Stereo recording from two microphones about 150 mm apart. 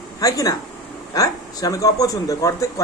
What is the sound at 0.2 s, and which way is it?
Speech, 25° left (ahead or behind).